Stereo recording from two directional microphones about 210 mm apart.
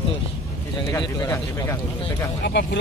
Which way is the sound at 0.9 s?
20° left (ahead or behind).